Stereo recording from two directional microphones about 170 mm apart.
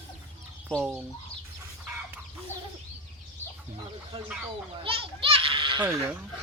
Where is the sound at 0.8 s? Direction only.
10° right (ahead or behind).